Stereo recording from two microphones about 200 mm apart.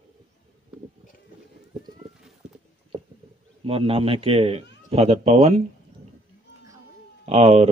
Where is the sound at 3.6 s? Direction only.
30° right (ahead or behind).